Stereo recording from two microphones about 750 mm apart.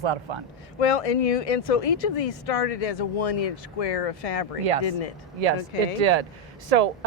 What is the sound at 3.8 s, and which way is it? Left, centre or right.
Speech, left.